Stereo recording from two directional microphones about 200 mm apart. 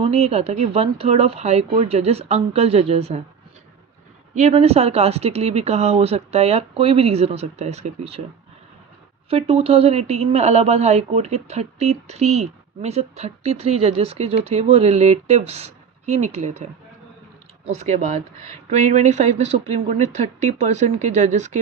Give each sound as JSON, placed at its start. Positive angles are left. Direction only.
{"t": 0.0, "sound": "speech", "side_deg": -30}
{"t": 4.4, "sound": "speech", "side_deg": -30}
{"t": 9.3, "sound": "speech", "side_deg": -30}
{"t": 17.7, "sound": "speech", "side_deg": -35}